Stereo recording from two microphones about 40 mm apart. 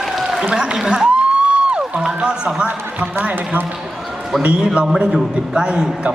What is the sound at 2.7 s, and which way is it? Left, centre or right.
Speech, right.